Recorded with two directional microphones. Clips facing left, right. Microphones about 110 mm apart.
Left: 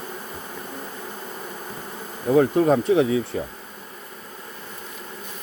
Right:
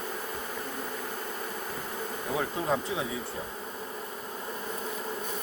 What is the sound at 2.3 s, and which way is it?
Speech, 65° left (ahead or behind).